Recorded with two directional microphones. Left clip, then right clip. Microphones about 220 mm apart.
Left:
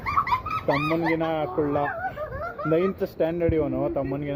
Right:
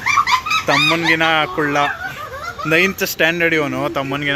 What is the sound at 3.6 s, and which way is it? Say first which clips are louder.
Speech: right 6 dB; 35° right (ahead or behind).